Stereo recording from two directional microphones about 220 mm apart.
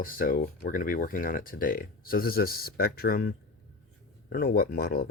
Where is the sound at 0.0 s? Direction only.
40° left (ahead or behind).